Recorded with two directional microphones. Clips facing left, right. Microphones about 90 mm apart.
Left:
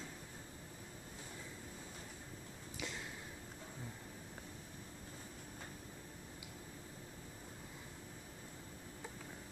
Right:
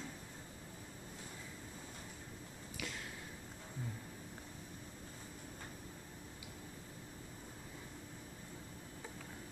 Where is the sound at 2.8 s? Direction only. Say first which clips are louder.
Even; 20° left (ahead or behind).